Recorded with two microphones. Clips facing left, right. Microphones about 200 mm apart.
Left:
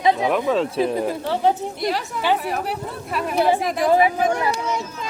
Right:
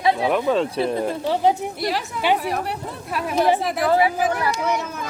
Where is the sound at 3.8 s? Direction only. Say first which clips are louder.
Left 4 dB; 20° left (ahead or behind).